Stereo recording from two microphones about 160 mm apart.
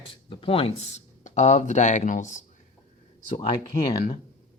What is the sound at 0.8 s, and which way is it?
Speech, 45° left (ahead or behind).